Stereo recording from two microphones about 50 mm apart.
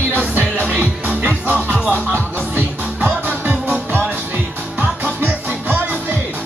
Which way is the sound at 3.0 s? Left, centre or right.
Right.